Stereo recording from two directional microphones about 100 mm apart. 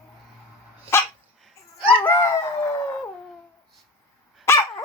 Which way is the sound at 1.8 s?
20° left (ahead or behind).